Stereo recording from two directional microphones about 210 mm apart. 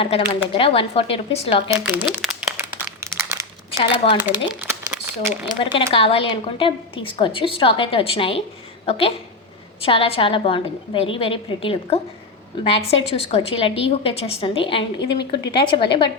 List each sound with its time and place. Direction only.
0.0 s a woman's voice: 25° left (ahead or behind)
1.8 s crumpling: 5° right (ahead or behind)
3.7 s a woman's voice: 25° left (ahead or behind)
4.2 s speech: 10° right (ahead or behind)
5.7 s a woman's voice: 25° left (ahead or behind)